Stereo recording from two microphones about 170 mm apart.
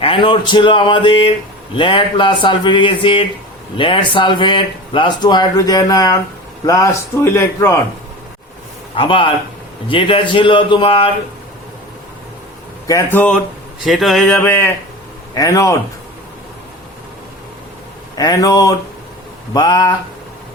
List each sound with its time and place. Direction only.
0.0 s a man's voice: 30° left (ahead or behind)
9.0 s a man's voice: 30° left (ahead or behind)
12.9 s a man's voice: 10° left (ahead or behind)
18.2 s speech: 20° left (ahead or behind)